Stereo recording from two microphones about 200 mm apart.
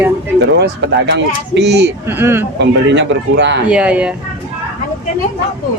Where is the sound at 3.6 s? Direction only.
5° right (ahead or behind).